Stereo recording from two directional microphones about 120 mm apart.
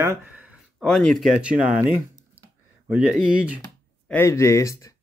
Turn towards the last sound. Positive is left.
turn(degrees=25)  # may be behind; listen again after turning